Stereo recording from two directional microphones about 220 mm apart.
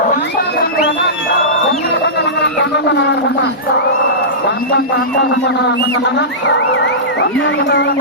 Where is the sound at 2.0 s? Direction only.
50° left (ahead or behind).